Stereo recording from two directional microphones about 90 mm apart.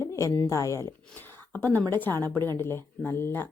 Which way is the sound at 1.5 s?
20° left (ahead or behind).